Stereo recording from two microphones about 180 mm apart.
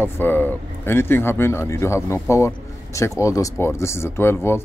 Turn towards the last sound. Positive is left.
turn(degrees=15)  # may be behind; listen again after turning